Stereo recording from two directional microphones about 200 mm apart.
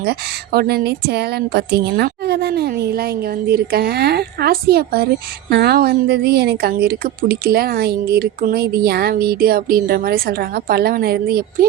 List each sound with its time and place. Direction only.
0.0 s a woman's voice: 50° right (ahead or behind)